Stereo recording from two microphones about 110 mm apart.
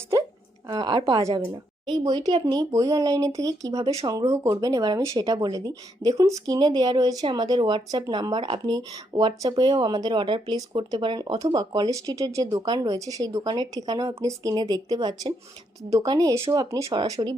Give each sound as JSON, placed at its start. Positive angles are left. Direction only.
{"t": 0.7, "sound": "speech", "side_deg": -35}
{"t": 16.9, "sound": "speech", "side_deg": -45}